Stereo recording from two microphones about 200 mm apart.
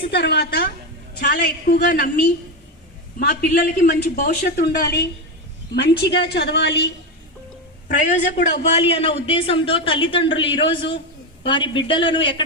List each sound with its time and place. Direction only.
0.0 s a woman's voice: 55° left (ahead or behind)
7.9 s a man's voice: 40° left (ahead or behind)